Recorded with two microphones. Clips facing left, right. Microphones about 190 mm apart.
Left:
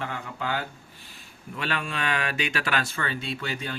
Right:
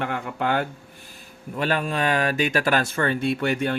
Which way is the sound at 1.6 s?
45° right (ahead or behind).